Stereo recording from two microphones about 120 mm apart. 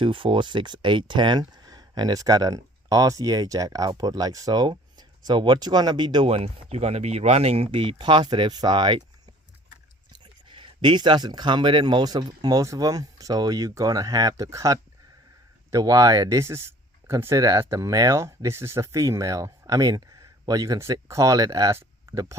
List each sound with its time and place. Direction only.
0.0 s speech: 45° right (ahead or behind)
10.1 s speech: 40° right (ahead or behind); by 22.4 s 25° right (ahead or behind)